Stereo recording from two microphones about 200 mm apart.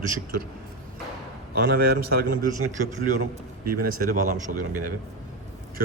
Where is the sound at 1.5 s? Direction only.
50° right (ahead or behind).